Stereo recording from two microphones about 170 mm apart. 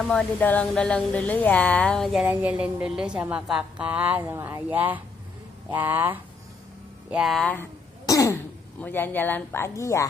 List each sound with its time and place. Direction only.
0.0 s a woman's voice: 5° left (ahead or behind)
8.1 s throat clearing: 20° left (ahead or behind)
8.8 s speech: 10° left (ahead or behind)